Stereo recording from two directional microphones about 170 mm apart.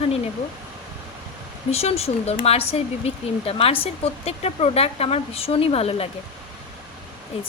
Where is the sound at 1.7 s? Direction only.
35° left (ahead or behind).